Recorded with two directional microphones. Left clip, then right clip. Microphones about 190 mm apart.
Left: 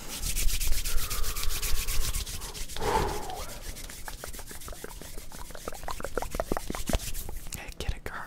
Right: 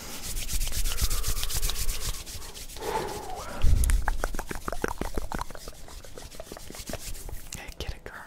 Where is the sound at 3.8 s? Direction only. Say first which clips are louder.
Right 9 dB; 60° right (ahead or behind); by 5.4 s 80° right.